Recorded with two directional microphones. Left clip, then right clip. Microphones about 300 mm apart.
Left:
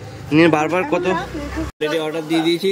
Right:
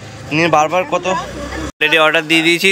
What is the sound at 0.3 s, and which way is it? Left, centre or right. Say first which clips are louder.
Speech: right 2 dB; centre.